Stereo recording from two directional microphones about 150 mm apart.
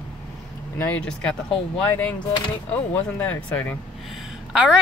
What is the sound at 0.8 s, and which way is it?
Speech, 10° left (ahead or behind).